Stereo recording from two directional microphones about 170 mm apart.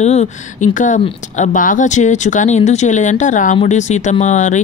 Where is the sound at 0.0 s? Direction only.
40° left (ahead or behind).